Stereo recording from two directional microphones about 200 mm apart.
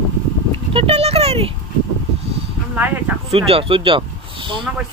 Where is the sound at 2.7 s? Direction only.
10° right (ahead or behind).